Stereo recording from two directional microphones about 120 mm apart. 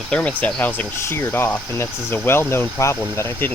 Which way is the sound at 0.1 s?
10° left (ahead or behind).